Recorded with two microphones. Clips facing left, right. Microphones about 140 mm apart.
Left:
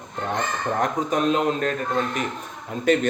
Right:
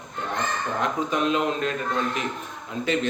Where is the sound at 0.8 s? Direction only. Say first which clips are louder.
Left 2 dB; 45° left (ahead or behind).